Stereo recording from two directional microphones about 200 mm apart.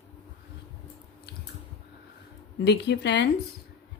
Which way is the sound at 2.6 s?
60° left (ahead or behind).